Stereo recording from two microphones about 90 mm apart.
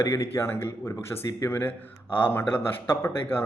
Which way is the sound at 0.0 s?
30° left (ahead or behind).